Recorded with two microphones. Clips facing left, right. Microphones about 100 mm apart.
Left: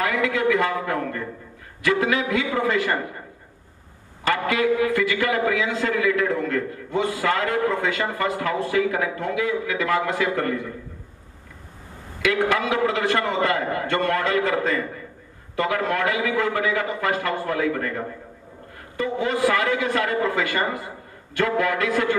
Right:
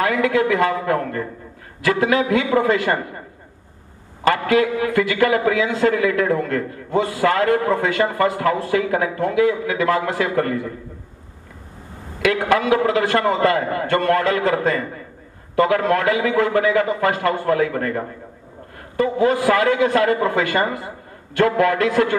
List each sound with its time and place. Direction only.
0.0 s a man's voice: 40° right (ahead or behind)
4.3 s a man's voice: 45° right (ahead or behind)
12.2 s a man's voice: 45° right (ahead or behind)